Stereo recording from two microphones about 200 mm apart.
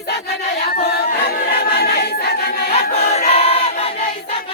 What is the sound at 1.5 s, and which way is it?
Choir, 50° left (ahead or behind).